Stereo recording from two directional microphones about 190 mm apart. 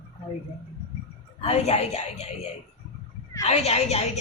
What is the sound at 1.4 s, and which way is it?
A woman's voice, 35° left (ahead or behind).